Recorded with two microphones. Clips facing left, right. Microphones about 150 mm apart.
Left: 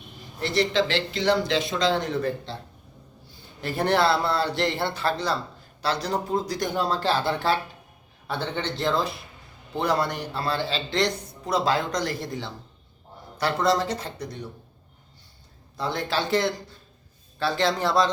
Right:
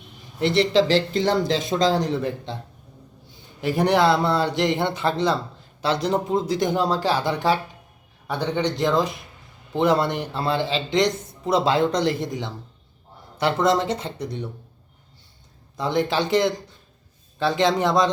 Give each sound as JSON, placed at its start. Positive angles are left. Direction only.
{"t": 0.3, "sound": "speech", "side_deg": -25}
{"t": 2.2, "sound": "a man's voice", "side_deg": -20}
{"t": 3.6, "sound": "a man's voice", "side_deg": -15}
{"t": 15.8, "sound": "a man's voice", "side_deg": -20}